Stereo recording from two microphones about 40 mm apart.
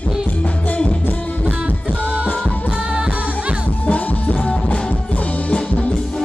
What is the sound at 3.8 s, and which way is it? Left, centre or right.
Music, left.